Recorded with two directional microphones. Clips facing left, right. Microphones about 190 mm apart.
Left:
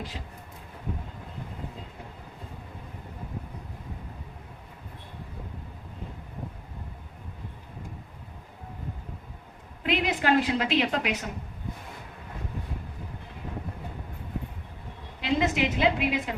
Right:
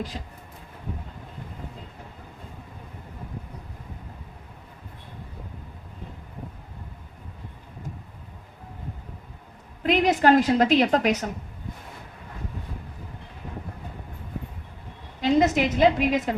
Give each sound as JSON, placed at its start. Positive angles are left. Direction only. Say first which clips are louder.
{"t": 9.8, "sound": "a woman's voice", "louder": "right 7 dB", "side_deg": -40}
{"t": 15.2, "sound": "a woman's voice", "louder": "right 5 dB", "side_deg": -40}